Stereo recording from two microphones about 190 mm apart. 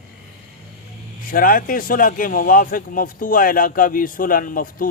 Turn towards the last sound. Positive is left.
turn(degrees=45)  # may be behind; listen again after turning